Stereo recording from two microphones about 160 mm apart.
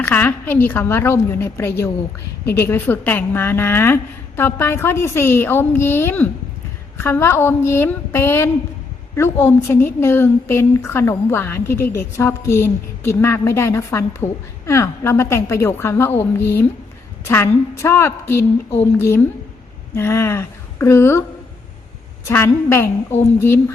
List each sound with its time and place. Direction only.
0.0 s a woman's voice: 15° left (ahead or behind)
22.3 s a woman's voice: 15° left (ahead or behind)